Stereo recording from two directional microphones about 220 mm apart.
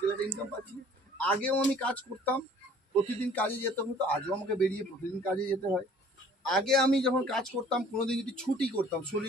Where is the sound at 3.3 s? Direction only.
10° left (ahead or behind).